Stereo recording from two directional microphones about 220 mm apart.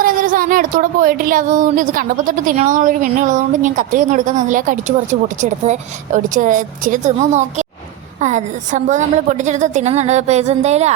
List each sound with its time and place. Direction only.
0.0 s speech: 40° right (ahead or behind)